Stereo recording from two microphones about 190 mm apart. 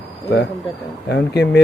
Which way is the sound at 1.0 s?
60° left (ahead or behind).